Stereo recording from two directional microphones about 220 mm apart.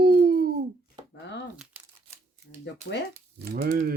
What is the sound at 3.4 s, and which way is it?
Speech, 45° right (ahead or behind).